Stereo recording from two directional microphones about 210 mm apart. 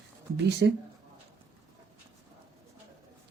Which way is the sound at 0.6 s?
50° right (ahead or behind).